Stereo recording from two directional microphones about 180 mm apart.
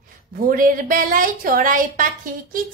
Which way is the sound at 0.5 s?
50° right (ahead or behind).